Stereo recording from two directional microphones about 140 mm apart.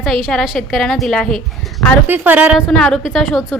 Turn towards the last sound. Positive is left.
turn(degrees=0)  # may be behind; listen again after turning